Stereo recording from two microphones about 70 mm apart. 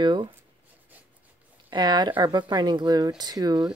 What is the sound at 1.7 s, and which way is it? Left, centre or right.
Speech, right.